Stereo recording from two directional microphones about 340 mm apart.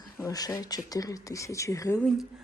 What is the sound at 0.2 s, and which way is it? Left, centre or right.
Speech, centre.